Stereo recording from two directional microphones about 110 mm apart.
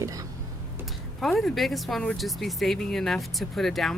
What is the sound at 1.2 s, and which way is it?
Speech, centre (ahead or behind).